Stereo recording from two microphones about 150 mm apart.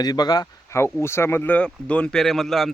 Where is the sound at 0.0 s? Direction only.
25° left (ahead or behind).